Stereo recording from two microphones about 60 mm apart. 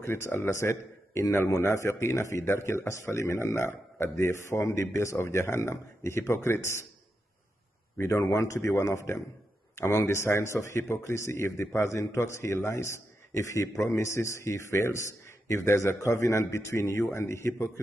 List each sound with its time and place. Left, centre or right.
0.0 s a man's voice: left
2.4 s a man's voice: left
8.0 s a man's voice: left